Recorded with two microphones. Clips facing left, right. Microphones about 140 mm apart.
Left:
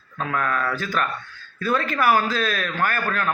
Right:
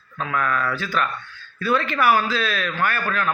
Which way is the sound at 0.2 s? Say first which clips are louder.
Right 1 dB; 40° left (ahead or behind).